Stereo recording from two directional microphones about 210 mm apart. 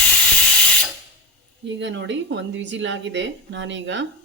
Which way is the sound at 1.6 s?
55° right (ahead or behind).